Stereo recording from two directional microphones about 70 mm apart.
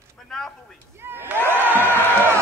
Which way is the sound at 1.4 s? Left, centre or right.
Right.